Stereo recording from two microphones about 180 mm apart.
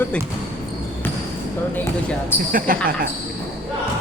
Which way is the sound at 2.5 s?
50° right (ahead or behind).